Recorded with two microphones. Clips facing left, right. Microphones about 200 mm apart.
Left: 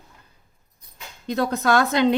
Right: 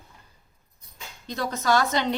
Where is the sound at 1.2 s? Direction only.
55° left (ahead or behind).